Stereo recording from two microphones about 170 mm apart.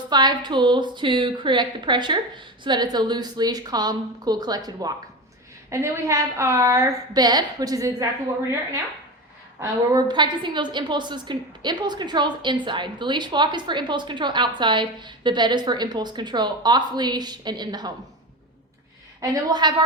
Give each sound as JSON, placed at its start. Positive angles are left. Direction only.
{"t": 0.1, "sound": "a woman's voice", "side_deg": -25}
{"t": 9.6, "sound": "a woman's voice", "side_deg": -25}
{"t": 19.2, "sound": "a woman's voice", "side_deg": -20}